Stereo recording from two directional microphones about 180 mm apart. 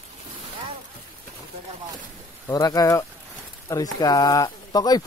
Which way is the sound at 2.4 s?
20° left (ahead or behind).